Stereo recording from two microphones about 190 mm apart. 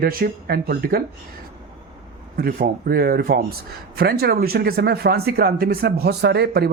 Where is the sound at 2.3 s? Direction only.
50° right (ahead or behind).